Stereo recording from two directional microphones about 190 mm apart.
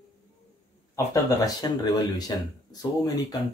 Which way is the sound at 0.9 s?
20° left (ahead or behind).